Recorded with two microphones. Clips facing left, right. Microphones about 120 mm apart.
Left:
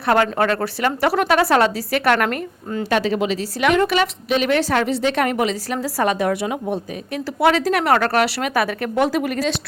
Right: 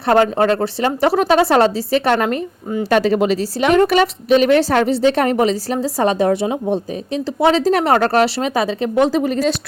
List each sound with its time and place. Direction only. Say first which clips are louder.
0.1 s a woman's voice: right 4 dB; 30° right (ahead or behind)
2.9 s a woman's voice: right 5 dB; 40° right (ahead or behind)